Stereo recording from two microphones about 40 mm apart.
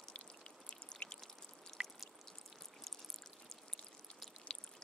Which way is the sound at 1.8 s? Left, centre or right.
Right.